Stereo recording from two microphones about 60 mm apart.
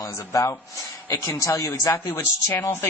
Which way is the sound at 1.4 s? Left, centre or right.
Left.